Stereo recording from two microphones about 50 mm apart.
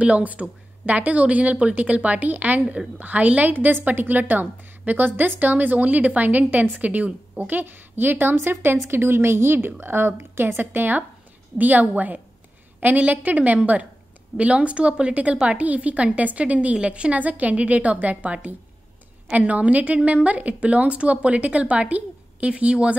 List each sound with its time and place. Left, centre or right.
0.0 s a woman's voice: right
2.6 s a woman's voice: centre
3.0 s a woman's voice: right